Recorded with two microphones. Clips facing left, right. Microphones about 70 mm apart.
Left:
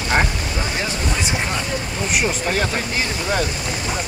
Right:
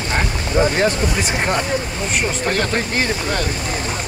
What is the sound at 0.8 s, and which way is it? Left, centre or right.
Speech, right.